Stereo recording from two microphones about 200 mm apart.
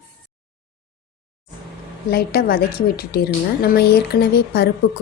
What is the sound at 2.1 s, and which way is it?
Speech, 50° left (ahead or behind).